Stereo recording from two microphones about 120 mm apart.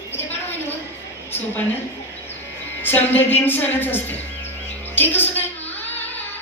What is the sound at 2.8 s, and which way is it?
A woman's voice, 15° left (ahead or behind).